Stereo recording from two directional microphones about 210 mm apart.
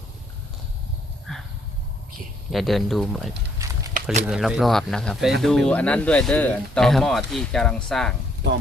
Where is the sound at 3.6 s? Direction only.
15° right (ahead or behind).